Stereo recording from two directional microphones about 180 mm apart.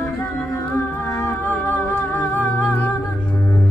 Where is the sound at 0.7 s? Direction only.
15° left (ahead or behind).